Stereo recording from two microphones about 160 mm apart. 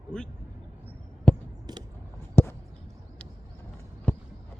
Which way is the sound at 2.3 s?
15° left (ahead or behind).